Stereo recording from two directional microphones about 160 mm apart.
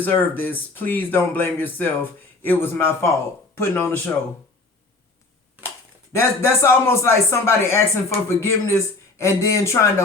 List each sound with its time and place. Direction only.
0.0 s speech: 10° left (ahead or behind)
6.1 s speech: 15° left (ahead or behind)